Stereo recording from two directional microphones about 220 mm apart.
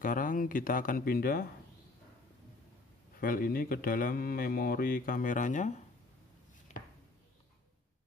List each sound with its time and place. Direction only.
0.0 s speech: 40° left (ahead or behind)
3.2 s speech: 40° left (ahead or behind)